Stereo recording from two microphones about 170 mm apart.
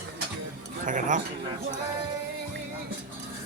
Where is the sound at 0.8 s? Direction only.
50° right (ahead or behind).